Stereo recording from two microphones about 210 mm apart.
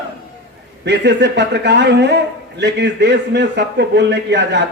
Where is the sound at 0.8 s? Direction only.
55° right (ahead or behind).